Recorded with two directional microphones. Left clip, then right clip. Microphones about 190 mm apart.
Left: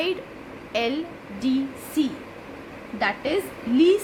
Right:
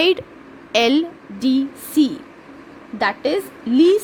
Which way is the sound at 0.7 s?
45° right (ahead or behind).